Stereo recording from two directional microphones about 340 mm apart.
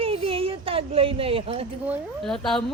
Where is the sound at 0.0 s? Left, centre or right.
Centre.